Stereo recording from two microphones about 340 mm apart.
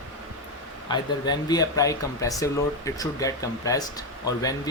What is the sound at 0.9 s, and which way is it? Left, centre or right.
Speech, centre.